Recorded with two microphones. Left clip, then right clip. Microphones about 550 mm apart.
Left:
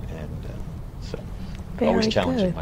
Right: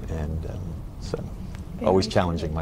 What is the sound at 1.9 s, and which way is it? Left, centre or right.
Speech, right.